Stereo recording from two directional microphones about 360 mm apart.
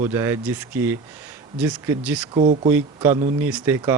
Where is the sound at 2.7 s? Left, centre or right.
Centre.